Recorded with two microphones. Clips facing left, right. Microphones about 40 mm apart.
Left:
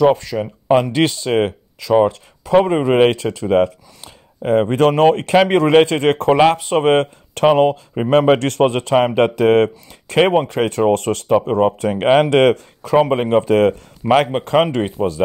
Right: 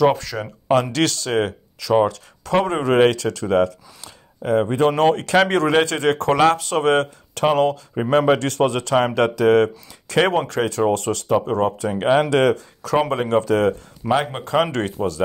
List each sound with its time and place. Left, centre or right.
0.0 s speech: centre
0.9 s speech: left
3.1 s speech: left
5.7 s speech: left
6.3 s speech: left
8.1 s speech: left
10.2 s speech: left
10.9 s speech: left
11.2 s speech: left
11.8 s speech: left
13.1 s speech: left
14.7 s speech: centre